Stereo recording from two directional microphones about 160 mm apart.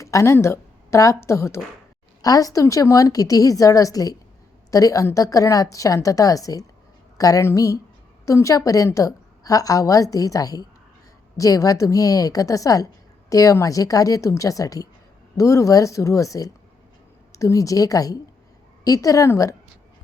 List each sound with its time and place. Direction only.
0.0 s a woman's voice: 20° left (ahead or behind)